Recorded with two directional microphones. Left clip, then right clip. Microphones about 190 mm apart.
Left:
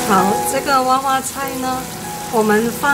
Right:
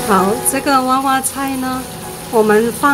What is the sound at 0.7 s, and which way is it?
Speech, 25° right (ahead or behind).